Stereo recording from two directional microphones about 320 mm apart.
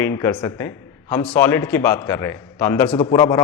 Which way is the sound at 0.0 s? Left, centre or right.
Centre.